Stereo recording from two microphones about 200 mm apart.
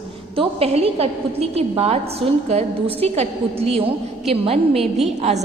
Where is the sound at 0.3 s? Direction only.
30° right (ahead or behind).